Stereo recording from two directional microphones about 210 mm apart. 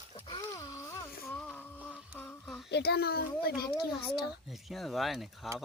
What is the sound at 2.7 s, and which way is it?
Speech, 50° left (ahead or behind).